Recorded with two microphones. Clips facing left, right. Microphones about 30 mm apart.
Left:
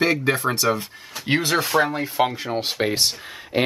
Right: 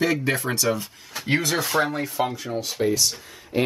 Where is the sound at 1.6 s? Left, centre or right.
Centre.